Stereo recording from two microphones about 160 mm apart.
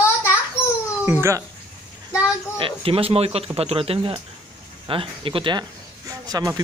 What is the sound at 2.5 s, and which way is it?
Speech, 35° right (ahead or behind).